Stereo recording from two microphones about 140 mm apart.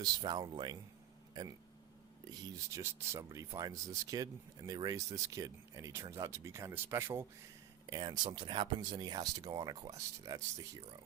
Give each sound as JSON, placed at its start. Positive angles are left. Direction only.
{"t": 0.0, "sound": "speech", "side_deg": -30}
{"t": 7.9, "sound": "speech", "side_deg": -30}